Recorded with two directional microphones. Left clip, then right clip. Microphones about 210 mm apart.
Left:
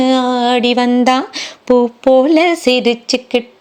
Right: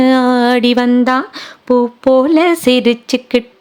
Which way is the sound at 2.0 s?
15° right (ahead or behind).